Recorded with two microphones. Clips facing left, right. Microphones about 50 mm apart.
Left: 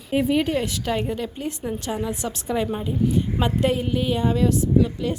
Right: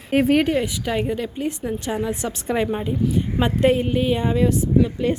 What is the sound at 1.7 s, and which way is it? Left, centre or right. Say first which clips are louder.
Speech: right 3 dB; right.